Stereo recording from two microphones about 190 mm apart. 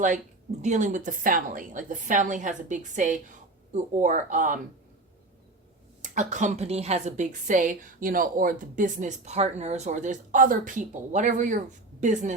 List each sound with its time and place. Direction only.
0.6 s a woman's voice: 40° right (ahead or behind)
6.0 s a woman's voice: 40° right (ahead or behind)